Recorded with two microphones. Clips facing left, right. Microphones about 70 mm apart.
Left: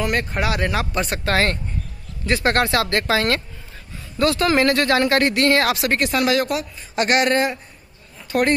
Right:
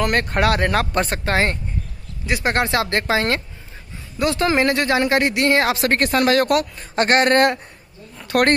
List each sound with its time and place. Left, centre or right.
0.0 s speech: right
1.1 s speech: right
5.8 s speech: right
7.0 s speech: right
7.3 s a woman's voice: right